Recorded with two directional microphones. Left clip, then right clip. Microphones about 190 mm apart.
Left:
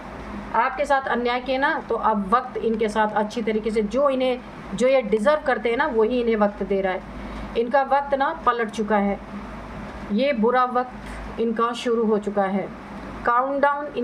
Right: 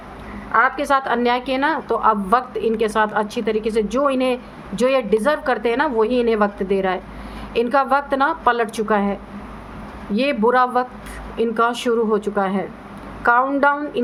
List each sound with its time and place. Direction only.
0.5 s a woman's voice: 30° right (ahead or behind)
10.2 s a woman's voice: 30° right (ahead or behind)